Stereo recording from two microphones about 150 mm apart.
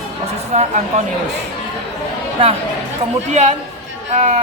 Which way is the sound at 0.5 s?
45° right (ahead or behind).